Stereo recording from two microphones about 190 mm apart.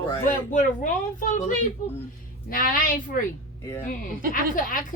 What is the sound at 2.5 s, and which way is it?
Speech, 45° left (ahead or behind).